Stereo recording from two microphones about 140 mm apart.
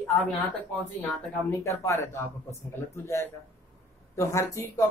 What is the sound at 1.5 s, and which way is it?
Speech, 20° left (ahead or behind).